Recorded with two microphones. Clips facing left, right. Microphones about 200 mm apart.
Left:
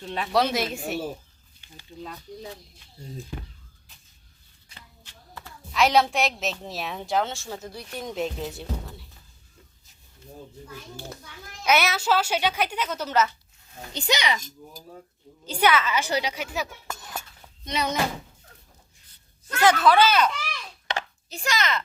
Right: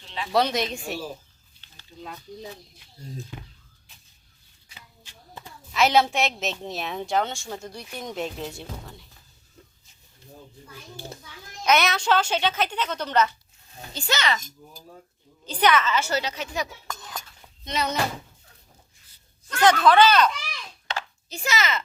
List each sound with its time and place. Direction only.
0.0 s speech: 50° left (ahead or behind)
0.3 s a woman's voice: centre (ahead or behind)
1.6 s a sound: 10° left (ahead or behind)
5.7 s a woman's voice: centre (ahead or behind)
11.6 s speech: 10° left (ahead or behind)
13.9 s speech: 15° left (ahead or behind)
15.4 s speech: 10° left (ahead or behind)
19.5 s a woman's voice: 5° left (ahead or behind)